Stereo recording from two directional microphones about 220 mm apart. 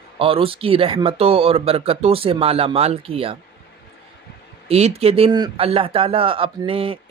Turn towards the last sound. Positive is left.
turn(degrees=-25)  # may be behind; listen again after turning